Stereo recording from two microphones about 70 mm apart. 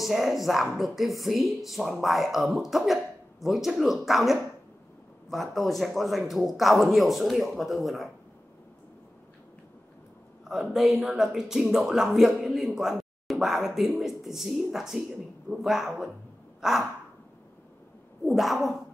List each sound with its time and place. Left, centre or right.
0.0 s speech: centre
10.5 s speech: centre
16.6 s crow: centre
18.2 s speech: centre